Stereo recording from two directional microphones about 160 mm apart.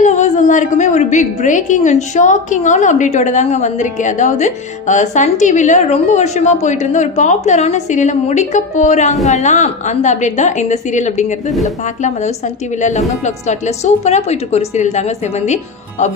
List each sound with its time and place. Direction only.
0.0 s a woman's voice: 50° left (ahead or behind)